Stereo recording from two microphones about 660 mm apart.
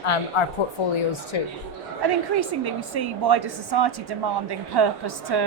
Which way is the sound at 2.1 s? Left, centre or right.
Right.